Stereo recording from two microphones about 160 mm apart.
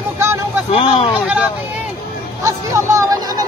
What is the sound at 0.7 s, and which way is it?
Speech, 35° left (ahead or behind).